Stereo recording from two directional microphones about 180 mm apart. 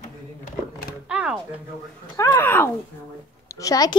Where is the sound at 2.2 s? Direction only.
15° left (ahead or behind).